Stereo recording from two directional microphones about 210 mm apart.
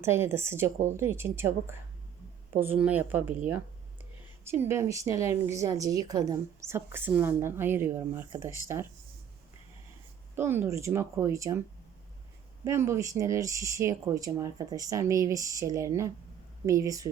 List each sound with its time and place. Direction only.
0.0 s a woman's voice: 10° right (ahead or behind)
4.5 s a woman's voice: 10° right (ahead or behind)
10.3 s a woman's voice: 10° right (ahead or behind)
12.6 s a woman's voice: 10° right (ahead or behind)